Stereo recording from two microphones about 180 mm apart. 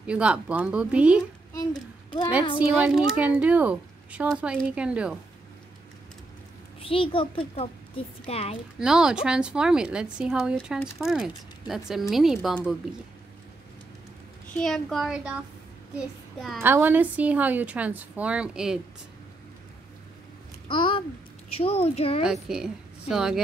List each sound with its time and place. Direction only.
0.0 s a woman's voice: 5° right (ahead or behind)
1.5 s a sound: 20° left (ahead or behind)
2.8 s a woman's voice: 5° right (ahead or behind)
6.8 s a child's voice: 30° left (ahead or behind)
8.7 s speech: 5° right (ahead or behind)
14.6 s speech: centre (ahead or behind)
16.0 s child singing: centre (ahead or behind)
16.6 s a woman's voice: 10° right (ahead or behind)
20.6 s a child's voice: 25° left (ahead or behind)
22.2 s a woman's voice: 5° right (ahead or behind)